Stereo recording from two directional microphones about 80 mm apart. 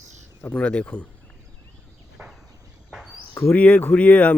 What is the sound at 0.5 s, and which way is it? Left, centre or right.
Speech, centre.